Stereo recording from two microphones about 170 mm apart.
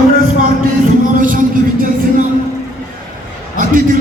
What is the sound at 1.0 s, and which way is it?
Music, 55° right (ahead or behind).